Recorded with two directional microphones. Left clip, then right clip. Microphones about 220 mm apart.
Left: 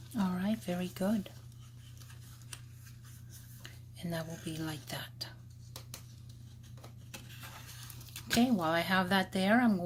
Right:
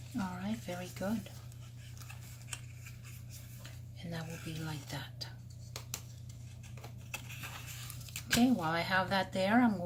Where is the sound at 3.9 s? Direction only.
55° left (ahead or behind).